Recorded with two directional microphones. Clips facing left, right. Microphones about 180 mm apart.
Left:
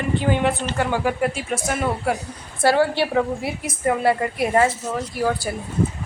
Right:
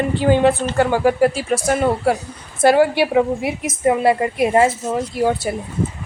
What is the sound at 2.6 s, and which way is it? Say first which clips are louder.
A woman's voice: right 4 dB; 15° right (ahead or behind).